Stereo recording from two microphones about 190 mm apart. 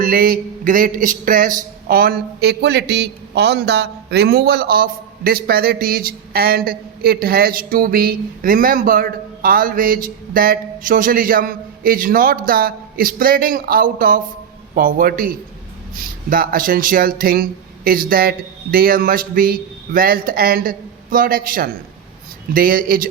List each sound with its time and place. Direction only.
0.0 s a man's voice: 50° right (ahead or behind)